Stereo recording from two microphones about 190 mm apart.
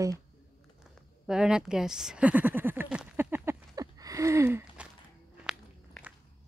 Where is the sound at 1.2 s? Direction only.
5° right (ahead or behind).